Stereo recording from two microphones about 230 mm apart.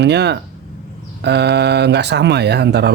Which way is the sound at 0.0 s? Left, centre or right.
Right.